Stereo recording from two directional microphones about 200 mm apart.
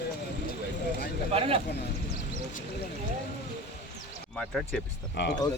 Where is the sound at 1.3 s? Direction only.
30° right (ahead or behind).